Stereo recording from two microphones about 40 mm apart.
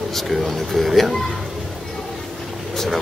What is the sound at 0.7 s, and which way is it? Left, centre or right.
Speech, centre.